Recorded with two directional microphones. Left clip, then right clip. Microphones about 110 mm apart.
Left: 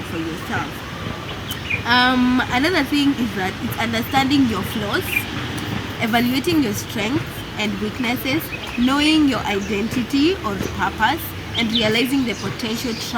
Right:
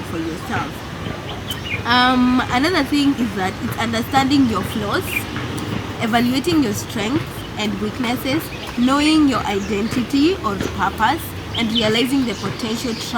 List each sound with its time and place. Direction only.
1.9 s speech: 5° right (ahead or behind)